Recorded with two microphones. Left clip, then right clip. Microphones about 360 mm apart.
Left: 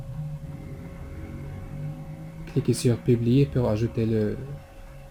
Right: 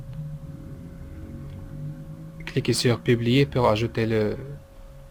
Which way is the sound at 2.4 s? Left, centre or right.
Right.